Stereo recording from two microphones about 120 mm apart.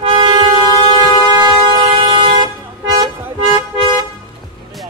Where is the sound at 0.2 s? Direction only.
45° right (ahead or behind).